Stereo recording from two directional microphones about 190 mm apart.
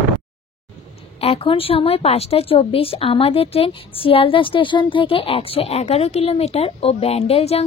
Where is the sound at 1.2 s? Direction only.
30° left (ahead or behind).